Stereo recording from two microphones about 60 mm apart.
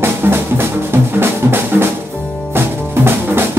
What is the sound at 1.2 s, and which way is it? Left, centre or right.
Music, right.